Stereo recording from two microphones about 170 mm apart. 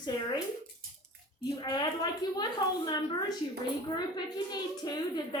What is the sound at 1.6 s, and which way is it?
Speech, 25° left (ahead or behind).